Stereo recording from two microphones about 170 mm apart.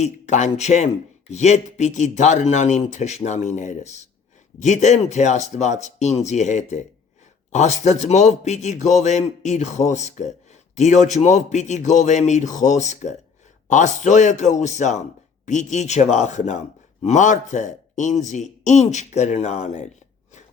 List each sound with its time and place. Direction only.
0.0 s a man's voice: 45° left (ahead or behind)